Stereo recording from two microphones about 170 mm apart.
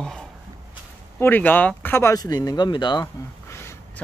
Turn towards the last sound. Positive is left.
turn(degrees=15)  # may be behind; listen again after turning